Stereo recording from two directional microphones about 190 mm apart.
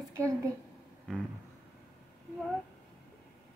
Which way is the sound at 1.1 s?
5° left (ahead or behind).